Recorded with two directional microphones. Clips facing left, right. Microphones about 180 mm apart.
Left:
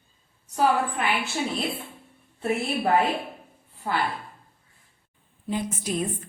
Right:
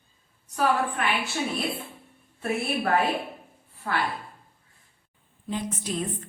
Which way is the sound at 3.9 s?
20° left (ahead or behind).